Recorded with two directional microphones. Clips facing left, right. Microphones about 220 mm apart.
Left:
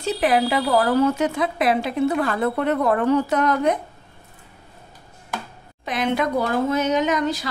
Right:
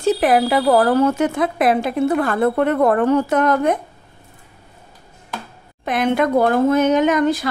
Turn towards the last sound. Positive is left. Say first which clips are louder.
# right 5 dB
turn(degrees=-55)  # may be behind; listen again after turning